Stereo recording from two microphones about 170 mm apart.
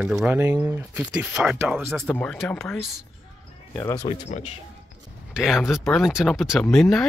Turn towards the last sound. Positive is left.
turn(degrees=0)  # may be behind; listen again after turning